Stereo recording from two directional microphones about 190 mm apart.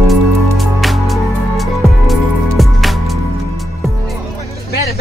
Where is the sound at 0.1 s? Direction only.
Centre (ahead or behind).